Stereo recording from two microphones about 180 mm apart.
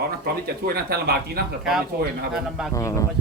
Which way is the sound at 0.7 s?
55° right (ahead or behind).